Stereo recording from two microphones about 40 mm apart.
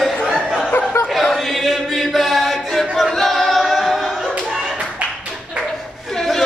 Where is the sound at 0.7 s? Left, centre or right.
Left.